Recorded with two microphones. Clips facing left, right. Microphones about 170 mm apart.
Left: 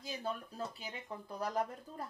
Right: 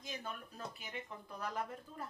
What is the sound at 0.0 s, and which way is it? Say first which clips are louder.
Speech: left 5 dB; 35° left (ahead or behind).